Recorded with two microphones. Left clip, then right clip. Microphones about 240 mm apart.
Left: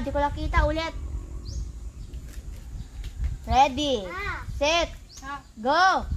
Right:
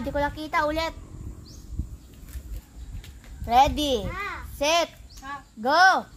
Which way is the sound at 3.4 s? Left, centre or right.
Right.